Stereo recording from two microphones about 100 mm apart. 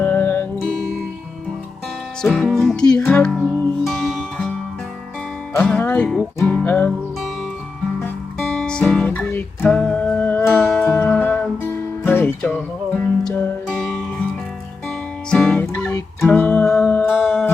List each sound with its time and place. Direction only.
0.0 s music: 20° left (ahead or behind)
2.2 s music: 5° left (ahead or behind)
5.6 s speech: 15° left (ahead or behind)
6.4 s music: 15° left (ahead or behind)
8.4 s music: 5° left (ahead or behind)
9.1 s music: 20° left (ahead or behind)
10.6 s music: 5° left (ahead or behind)
13.7 s music: centre (ahead or behind)
15.3 s music: 10° left (ahead or behind)